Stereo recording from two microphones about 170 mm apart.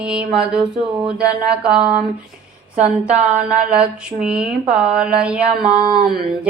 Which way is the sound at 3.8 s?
5° right (ahead or behind).